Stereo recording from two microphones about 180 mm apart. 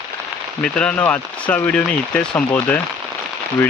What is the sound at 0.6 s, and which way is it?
Speech, 5° left (ahead or behind).